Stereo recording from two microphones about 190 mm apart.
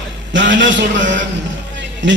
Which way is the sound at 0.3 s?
70° right (ahead or behind).